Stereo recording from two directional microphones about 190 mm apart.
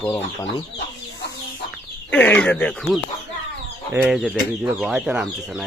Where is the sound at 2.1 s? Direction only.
10° left (ahead or behind).